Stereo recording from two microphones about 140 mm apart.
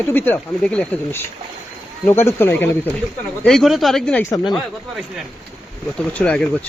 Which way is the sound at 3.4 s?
5° left (ahead or behind).